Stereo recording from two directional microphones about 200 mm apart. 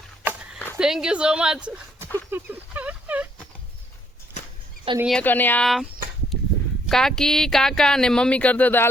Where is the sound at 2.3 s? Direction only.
10° right (ahead or behind).